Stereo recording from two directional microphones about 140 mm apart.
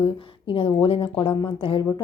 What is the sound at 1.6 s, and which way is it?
Speech, 40° left (ahead or behind).